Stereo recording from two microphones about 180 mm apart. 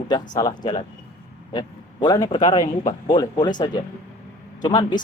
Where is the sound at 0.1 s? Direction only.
20° left (ahead or behind).